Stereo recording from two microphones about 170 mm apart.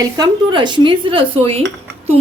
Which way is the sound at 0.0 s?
25° right (ahead or behind).